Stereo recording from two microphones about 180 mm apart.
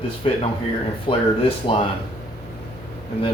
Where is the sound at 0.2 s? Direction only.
30° left (ahead or behind).